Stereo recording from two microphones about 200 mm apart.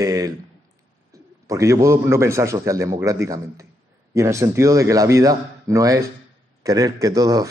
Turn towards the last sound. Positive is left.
turn(degrees=-20)  # may be behind; listen again after turning